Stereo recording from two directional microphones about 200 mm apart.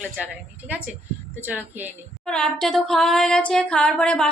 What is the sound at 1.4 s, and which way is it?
Speech, 10° right (ahead or behind).